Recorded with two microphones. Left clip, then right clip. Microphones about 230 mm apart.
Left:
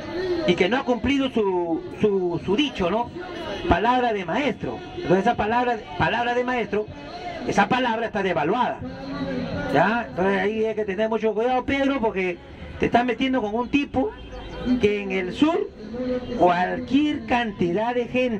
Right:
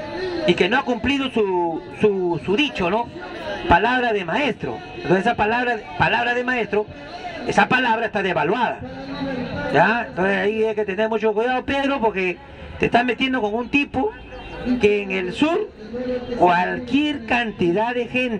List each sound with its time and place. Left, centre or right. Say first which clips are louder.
0.2 s a man's voice: right 2 dB; right